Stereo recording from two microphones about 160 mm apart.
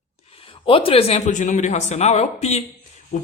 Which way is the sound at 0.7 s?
35° left (ahead or behind).